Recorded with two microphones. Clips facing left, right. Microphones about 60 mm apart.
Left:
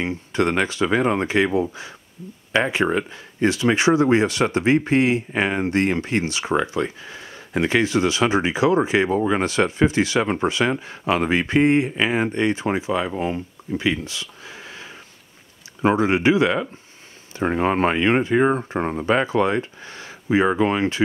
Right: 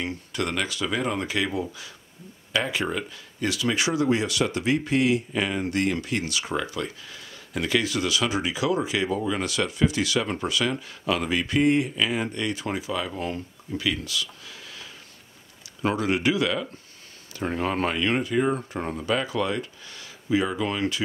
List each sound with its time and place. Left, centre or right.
0.0 s speech: left